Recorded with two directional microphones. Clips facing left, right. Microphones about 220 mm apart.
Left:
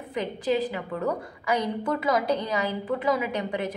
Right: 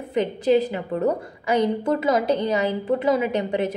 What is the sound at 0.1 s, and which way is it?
A woman's voice, 25° right (ahead or behind).